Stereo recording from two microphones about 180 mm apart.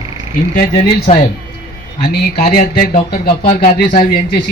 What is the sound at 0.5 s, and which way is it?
Speech, 45° left (ahead or behind).